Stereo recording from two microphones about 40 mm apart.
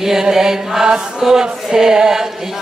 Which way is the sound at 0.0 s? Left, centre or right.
Centre.